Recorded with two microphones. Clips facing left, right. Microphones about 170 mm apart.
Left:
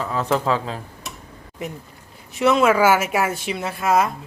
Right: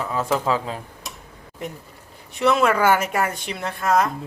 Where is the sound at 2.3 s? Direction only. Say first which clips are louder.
Left 2 dB; centre (ahead or behind).